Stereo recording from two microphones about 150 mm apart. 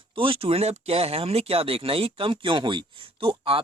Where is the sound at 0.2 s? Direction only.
40° right (ahead or behind).